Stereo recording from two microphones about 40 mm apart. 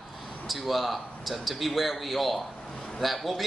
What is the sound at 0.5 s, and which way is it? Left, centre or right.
A man's voice, centre.